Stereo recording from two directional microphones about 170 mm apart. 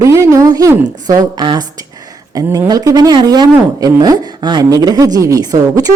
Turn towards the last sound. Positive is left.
turn(degrees=-20)  # may be behind; listen again after turning